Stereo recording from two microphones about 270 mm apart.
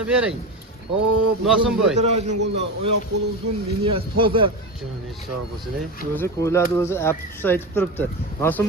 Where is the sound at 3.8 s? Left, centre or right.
Centre.